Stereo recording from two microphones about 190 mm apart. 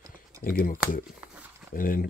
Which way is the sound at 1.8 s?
45° left (ahead or behind).